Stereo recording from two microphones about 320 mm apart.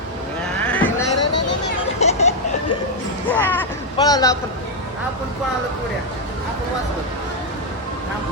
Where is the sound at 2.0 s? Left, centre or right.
Centre.